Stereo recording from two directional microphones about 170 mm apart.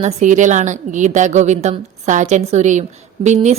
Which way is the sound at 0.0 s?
45° right (ahead or behind).